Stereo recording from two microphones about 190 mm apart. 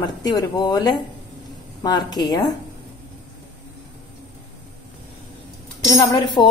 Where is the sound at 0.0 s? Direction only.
20° left (ahead or behind).